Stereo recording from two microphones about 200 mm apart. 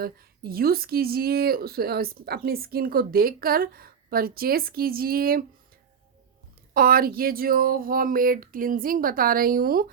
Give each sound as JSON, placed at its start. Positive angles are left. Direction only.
{"t": 0.0, "sound": "speech", "side_deg": -50}
{"t": 6.7, "sound": "speech", "side_deg": -45}